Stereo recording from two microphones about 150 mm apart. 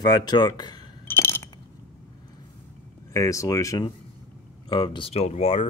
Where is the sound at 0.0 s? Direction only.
25° left (ahead or behind).